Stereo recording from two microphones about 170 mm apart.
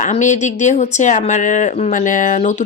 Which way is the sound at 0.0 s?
45° left (ahead or behind).